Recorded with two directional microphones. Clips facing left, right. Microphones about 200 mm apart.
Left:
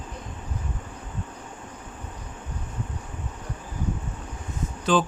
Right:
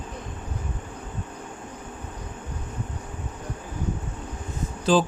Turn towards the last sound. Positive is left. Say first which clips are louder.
# right 2 dB
turn(degrees=-35)  # may be behind; listen again after turning